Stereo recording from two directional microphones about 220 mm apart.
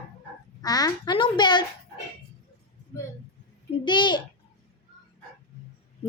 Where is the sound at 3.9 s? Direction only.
20° left (ahead or behind).